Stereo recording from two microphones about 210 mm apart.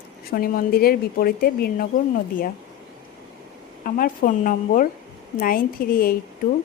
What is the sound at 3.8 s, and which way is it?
A woman's voice, 40° left (ahead or behind).